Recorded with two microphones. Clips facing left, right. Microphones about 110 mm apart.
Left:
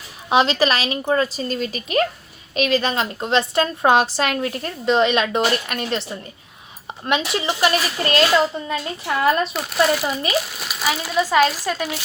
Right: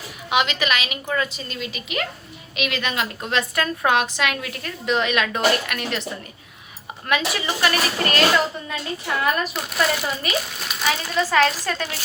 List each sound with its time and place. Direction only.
0.3 s a woman's voice: 35° left (ahead or behind)
9.2 s a woman's voice: 30° left (ahead or behind)
9.5 s speech: centre (ahead or behind)